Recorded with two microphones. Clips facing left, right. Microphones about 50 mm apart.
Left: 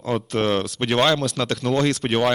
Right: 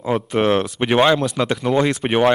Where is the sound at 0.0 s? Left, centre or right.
Centre.